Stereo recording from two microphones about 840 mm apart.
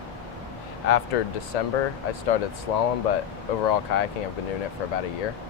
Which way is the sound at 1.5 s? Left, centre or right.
Left.